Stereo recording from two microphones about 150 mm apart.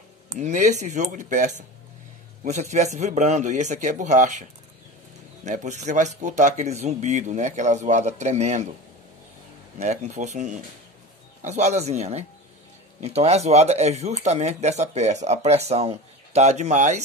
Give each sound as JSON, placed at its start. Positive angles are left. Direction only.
{"t": 0.3, "sound": "speech", "side_deg": -55}
{"t": 9.8, "sound": "speech", "side_deg": -50}